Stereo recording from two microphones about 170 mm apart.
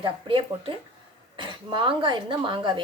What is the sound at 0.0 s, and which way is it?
A woman's voice, 30° right (ahead or behind).